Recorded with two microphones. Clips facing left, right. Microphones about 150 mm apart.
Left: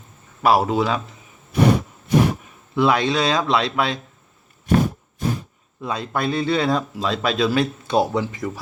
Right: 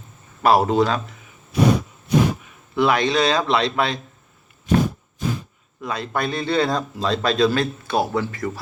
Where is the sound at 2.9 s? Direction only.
10° left (ahead or behind).